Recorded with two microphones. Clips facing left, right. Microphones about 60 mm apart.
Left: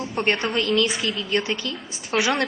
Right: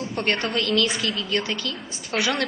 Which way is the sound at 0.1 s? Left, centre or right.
Centre.